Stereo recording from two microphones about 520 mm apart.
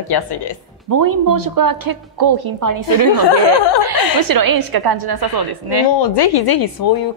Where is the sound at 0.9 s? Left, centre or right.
Right.